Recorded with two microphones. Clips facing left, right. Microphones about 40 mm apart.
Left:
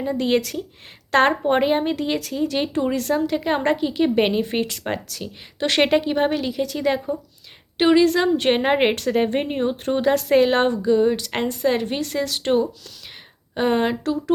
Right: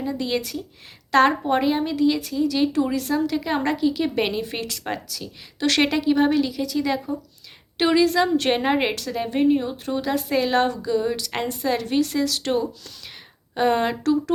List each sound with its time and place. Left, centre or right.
0.0 s a woman's voice: left
5.0 s speech: left
5.5 s a woman's voice: left
7.8 s a woman's voice: centre; by 10.2 s left
10.4 s a woman's voice: left
12.4 s a woman's voice: left